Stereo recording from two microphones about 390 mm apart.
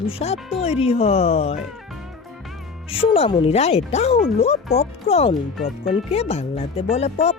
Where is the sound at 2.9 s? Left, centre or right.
Centre.